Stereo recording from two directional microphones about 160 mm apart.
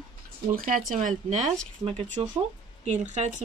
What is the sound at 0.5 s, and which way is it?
Speech, 60° right (ahead or behind).